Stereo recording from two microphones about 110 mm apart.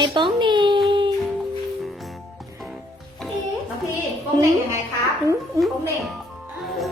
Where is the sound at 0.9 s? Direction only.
45° right (ahead or behind).